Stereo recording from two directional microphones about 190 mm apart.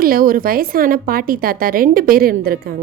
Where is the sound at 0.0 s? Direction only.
50° right (ahead or behind).